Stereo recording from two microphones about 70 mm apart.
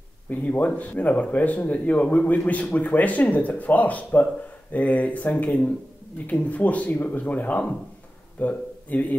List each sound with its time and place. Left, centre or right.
0.3 s speech: left